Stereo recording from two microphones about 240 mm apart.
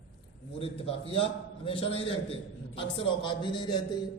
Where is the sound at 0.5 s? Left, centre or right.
Left.